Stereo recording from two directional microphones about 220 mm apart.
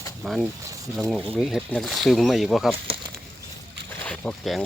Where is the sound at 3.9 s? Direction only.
5° left (ahead or behind).